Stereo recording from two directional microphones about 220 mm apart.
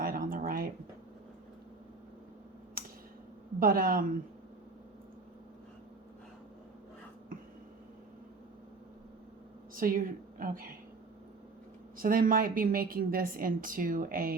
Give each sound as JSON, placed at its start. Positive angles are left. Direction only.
{"t": 0.0, "sound": "a sound", "side_deg": -40}
{"t": 3.6, "sound": "a woman's voice", "side_deg": -40}
{"t": 9.7, "sound": "a woman's voice", "side_deg": -40}
{"t": 11.9, "sound": "a woman's voice", "side_deg": -40}